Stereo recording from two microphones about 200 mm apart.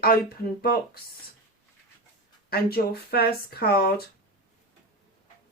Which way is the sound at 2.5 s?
50° left (ahead or behind).